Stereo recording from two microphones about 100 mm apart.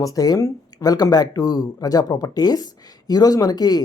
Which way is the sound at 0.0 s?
35° left (ahead or behind).